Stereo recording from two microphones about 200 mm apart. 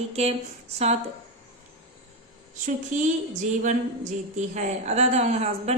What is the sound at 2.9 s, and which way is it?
A woman's voice, 40° right (ahead or behind).